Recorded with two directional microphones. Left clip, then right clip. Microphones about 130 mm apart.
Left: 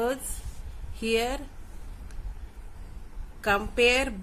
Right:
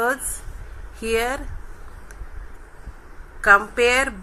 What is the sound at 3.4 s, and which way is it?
Speech, 25° left (ahead or behind).